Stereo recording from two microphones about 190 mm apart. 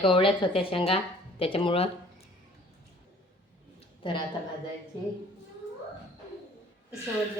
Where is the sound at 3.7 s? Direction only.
25° left (ahead or behind).